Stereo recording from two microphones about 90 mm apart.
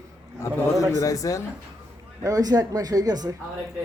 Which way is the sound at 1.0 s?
40° left (ahead or behind).